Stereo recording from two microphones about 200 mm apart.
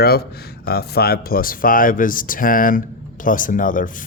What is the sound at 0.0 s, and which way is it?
Speech, 50° left (ahead or behind).